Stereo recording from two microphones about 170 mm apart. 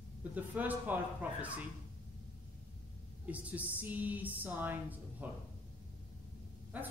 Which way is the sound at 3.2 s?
10° right (ahead or behind).